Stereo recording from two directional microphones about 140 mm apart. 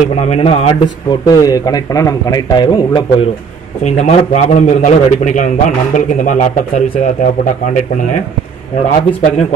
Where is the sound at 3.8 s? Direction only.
55° left (ahead or behind).